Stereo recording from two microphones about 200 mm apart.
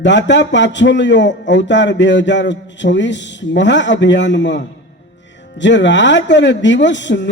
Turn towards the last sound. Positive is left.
turn(degrees=65)  # may be behind; listen again after turning